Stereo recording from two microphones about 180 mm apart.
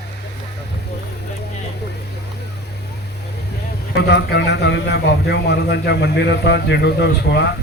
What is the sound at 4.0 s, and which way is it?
A man's voice, 65° left (ahead or behind).